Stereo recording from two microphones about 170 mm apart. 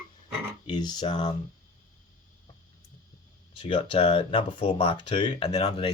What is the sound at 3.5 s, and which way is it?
Speech, 30° left (ahead or behind).